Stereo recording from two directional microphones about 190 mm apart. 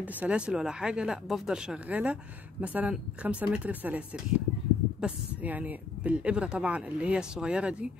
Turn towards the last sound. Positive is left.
turn(degrees=-5)  # may be behind; listen again after turning